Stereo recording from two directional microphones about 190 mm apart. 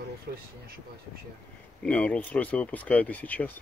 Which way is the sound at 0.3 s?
60° right (ahead or behind).